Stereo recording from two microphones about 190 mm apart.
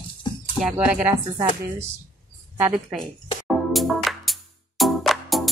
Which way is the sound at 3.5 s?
Centre (ahead or behind).